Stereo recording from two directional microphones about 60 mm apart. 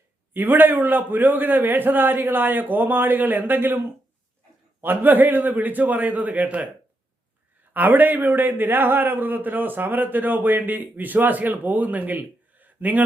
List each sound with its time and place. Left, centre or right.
0.3 s a man's voice: right
7.7 s a man's voice: right